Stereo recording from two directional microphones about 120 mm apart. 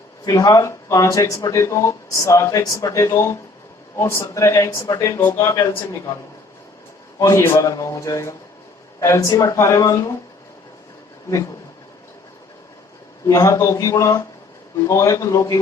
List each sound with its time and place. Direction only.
0.3 s speech: 30° left (ahead or behind)
7.2 s speech: 25° left (ahead or behind)
13.2 s speech: 25° left (ahead or behind)